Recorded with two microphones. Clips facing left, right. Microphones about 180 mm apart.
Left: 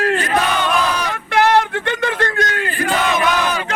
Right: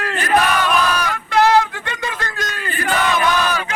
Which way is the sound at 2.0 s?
60° left (ahead or behind).